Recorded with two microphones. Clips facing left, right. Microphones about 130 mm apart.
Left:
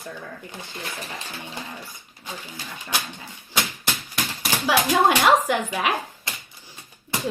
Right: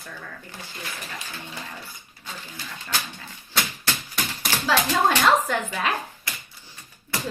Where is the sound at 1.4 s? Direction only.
15° left (ahead or behind).